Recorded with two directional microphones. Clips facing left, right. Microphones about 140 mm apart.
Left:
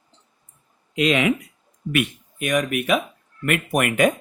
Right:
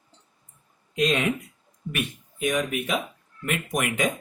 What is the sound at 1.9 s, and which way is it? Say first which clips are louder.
Speech: left 8 dB; 75° left (ahead or behind).